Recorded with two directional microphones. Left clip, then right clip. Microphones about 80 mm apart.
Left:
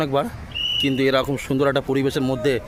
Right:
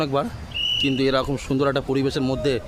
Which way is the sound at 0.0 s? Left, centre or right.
Left.